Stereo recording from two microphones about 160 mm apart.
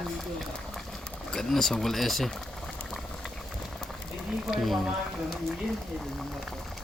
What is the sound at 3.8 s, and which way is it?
Speech, centre (ahead or behind).